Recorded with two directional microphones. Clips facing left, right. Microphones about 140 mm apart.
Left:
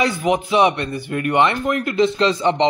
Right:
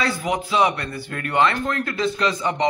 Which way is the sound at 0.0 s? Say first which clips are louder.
Left 5 dB; 20° left (ahead or behind).